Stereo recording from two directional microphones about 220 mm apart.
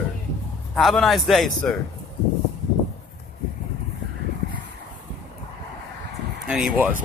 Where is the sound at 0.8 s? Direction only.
Centre (ahead or behind).